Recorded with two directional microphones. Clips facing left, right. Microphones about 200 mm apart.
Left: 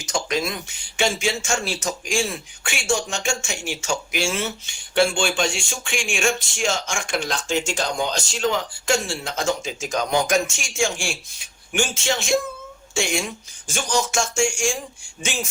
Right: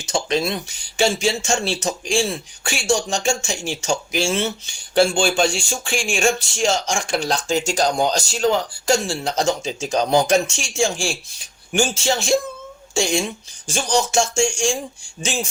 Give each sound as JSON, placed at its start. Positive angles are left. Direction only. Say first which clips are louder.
{"t": 0.0, "sound": "speech", "louder": "right 3 dB", "side_deg": -30}